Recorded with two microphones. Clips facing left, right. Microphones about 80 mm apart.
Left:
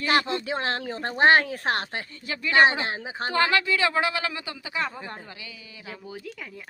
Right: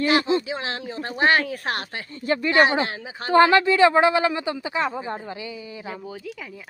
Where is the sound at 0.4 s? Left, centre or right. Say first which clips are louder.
Left 1 dB; left.